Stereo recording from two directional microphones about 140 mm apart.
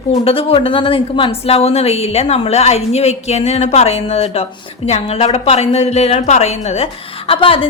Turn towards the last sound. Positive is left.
turn(degrees=40)  # may be behind; listen again after turning